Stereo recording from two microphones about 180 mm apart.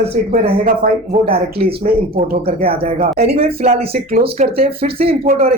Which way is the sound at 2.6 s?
35° right (ahead or behind).